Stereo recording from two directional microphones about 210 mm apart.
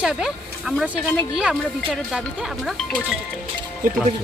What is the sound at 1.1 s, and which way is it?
A woman's voice, 5° left (ahead or behind).